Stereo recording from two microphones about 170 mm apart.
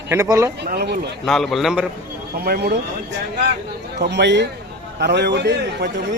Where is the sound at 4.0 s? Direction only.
90° right.